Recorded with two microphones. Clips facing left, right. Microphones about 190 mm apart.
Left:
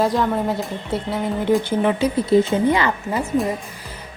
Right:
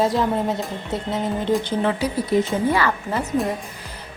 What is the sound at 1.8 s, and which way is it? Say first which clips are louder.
A woman's voice: left 3 dB; 25° left (ahead or behind).